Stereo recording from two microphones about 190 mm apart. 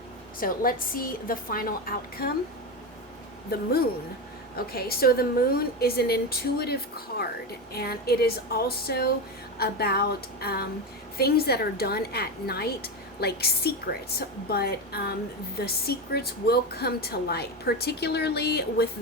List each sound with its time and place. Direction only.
0.3 s a woman's voice: 50° left (ahead or behind)
3.5 s a woman's voice: 55° left (ahead or behind)